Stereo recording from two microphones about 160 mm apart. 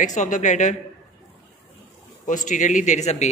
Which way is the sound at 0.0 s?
50° left (ahead or behind).